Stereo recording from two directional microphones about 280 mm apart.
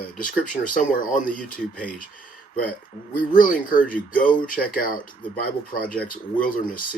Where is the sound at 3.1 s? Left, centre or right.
Left.